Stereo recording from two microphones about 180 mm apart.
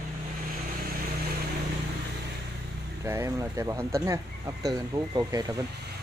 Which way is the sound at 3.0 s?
15° right (ahead or behind).